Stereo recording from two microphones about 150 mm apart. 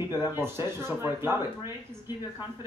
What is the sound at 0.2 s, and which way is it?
Speech, 15° right (ahead or behind).